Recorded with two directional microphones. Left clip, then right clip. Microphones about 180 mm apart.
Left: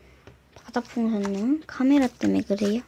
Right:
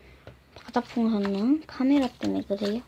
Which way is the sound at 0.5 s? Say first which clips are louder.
Right 1 dB; 5° left (ahead or behind).